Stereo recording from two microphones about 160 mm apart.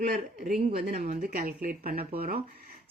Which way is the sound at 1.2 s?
60° right (ahead or behind).